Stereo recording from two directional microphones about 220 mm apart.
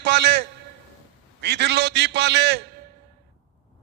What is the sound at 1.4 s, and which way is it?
A man's voice, 50° right (ahead or behind).